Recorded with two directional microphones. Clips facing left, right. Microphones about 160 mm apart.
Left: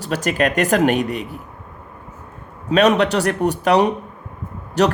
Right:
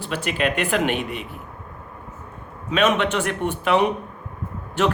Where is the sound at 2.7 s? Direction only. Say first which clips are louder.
Left 5 dB; 40° left (ahead or behind).